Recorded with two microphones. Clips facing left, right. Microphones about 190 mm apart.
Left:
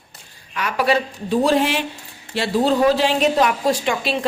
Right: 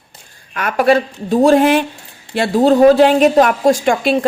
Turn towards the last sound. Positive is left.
turn(degrees=-50)  # may be behind; listen again after turning